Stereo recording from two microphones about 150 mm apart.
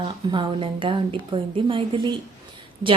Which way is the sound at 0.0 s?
35° right (ahead or behind).